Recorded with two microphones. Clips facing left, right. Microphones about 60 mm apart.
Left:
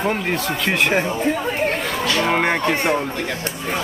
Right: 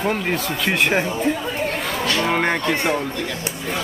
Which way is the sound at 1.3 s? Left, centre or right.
Left.